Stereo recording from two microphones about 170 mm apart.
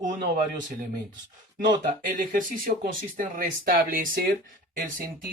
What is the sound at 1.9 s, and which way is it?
Speech, 55° right (ahead or behind).